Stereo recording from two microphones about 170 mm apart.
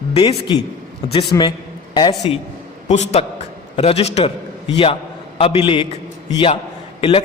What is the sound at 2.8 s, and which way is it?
A man's voice, 40° left (ahead or behind).